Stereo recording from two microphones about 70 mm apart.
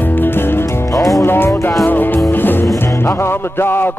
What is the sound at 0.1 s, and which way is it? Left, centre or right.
Music, left.